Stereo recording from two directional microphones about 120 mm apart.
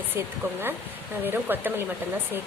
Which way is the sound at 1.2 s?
15° right (ahead or behind).